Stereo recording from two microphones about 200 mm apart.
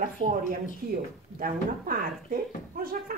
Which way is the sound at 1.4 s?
45° right (ahead or behind).